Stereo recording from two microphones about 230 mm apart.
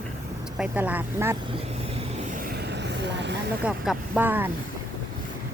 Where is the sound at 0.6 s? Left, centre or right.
Centre.